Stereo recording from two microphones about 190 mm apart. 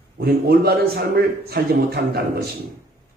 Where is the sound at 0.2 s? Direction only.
55° right (ahead or behind).